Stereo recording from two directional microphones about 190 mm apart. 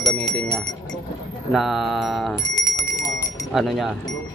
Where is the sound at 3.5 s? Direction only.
Centre (ahead or behind).